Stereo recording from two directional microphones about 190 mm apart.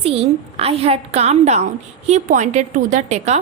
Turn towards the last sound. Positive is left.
turn(degrees=-35)  # may be behind; listen again after turning